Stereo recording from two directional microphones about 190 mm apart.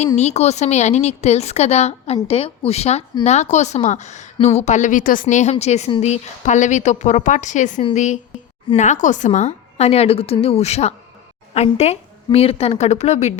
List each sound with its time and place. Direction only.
0.2 s speech: 35° left (ahead or behind)